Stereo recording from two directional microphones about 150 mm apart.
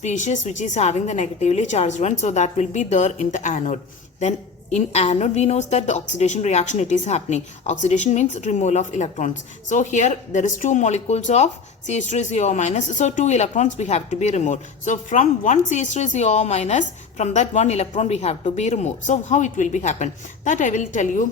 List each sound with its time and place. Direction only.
0.0 s a woman's voice: 50° left (ahead or behind)